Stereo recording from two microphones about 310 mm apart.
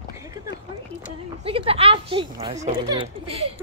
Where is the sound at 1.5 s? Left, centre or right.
Centre.